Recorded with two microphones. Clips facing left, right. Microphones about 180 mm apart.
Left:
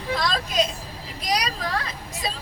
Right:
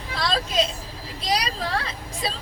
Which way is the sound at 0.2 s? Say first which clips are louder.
Right 3 dB; 30° right (ahead or behind).